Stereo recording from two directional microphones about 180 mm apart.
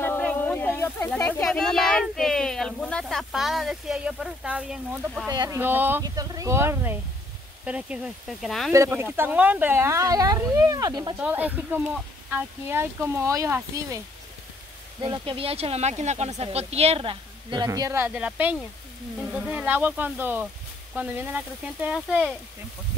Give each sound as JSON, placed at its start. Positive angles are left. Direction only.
{"t": 0.0, "sound": "speech", "side_deg": 10}
{"t": 5.3, "sound": "speech", "side_deg": -20}
{"t": 5.6, "sound": "speech", "side_deg": -10}
{"t": 8.7, "sound": "speech", "side_deg": -15}
{"t": 11.1, "sound": "speech", "side_deg": -10}
{"t": 15.0, "sound": "speech", "side_deg": -30}